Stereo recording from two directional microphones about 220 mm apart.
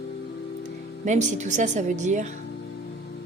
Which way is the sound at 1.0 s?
35° right (ahead or behind).